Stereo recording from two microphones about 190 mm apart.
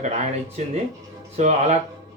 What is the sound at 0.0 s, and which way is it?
Speech, 35° right (ahead or behind).